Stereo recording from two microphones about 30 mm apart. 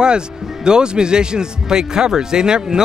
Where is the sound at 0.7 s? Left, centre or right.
Right.